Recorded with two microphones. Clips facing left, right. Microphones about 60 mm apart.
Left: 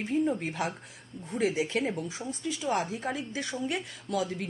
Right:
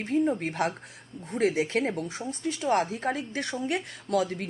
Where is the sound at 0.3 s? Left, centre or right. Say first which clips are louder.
Right 4 dB; right.